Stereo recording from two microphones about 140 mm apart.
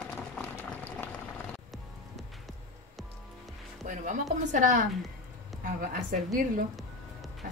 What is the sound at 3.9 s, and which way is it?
Speech, 65° right (ahead or behind).